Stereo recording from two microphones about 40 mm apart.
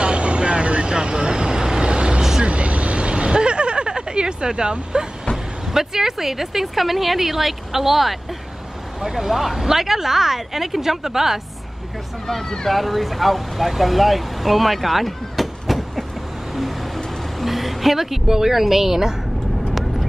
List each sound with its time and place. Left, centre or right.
0.0 s vehicle: right
5.7 s speech: centre
12.3 s speech: centre
17.4 s a woman's voice: centre